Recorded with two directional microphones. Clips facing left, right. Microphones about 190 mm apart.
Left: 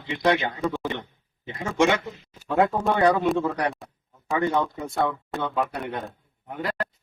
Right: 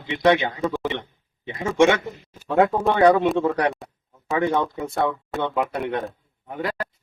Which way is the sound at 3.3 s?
Centre (ahead or behind).